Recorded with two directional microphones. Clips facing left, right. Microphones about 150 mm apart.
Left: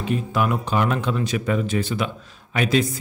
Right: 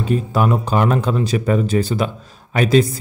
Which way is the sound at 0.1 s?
35° right (ahead or behind).